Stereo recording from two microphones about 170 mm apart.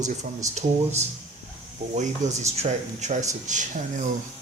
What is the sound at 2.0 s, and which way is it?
Speech, 40° right (ahead or behind).